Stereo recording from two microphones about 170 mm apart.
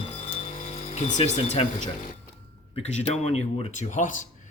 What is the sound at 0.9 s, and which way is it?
Speech, 40° left (ahead or behind).